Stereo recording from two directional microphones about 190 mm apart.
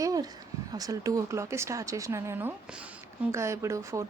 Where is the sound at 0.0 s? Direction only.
20° right (ahead or behind).